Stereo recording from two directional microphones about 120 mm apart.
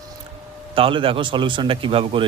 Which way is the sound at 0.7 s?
50° right (ahead or behind).